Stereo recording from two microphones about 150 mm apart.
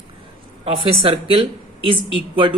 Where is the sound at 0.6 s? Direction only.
40° right (ahead or behind).